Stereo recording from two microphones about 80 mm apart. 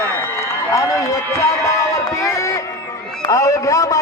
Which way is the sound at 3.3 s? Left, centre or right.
Left.